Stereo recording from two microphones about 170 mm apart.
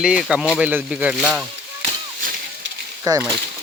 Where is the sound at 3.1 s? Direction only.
20° right (ahead or behind).